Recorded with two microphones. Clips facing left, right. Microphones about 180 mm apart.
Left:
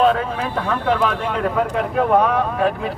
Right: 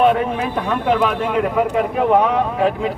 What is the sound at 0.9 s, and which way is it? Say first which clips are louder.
Speech: right 3 dB; 10° right (ahead or behind).